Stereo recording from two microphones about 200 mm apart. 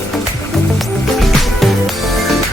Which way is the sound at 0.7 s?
Centre (ahead or behind).